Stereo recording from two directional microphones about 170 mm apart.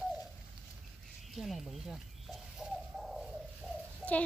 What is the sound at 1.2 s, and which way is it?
Bird, centre (ahead or behind).